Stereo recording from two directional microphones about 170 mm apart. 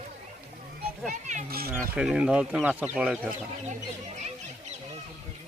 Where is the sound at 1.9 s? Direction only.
5° right (ahead or behind).